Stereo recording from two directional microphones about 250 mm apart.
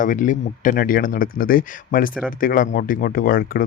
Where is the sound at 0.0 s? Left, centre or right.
Left.